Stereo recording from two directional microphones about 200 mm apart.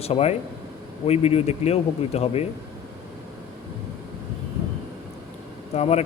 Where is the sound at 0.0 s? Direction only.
30° left (ahead or behind).